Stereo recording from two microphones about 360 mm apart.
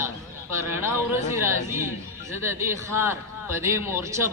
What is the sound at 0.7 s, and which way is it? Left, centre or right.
Speech, centre.